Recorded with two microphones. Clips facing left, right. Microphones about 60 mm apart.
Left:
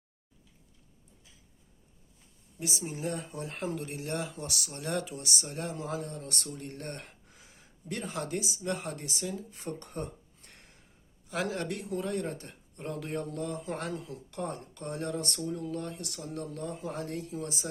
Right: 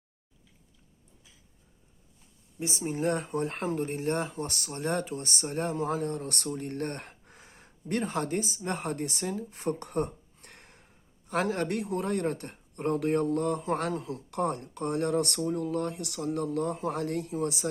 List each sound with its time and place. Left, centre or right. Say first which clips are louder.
2.6 s speech: right 5 dB; right
3.8 s speech: right 6 dB; right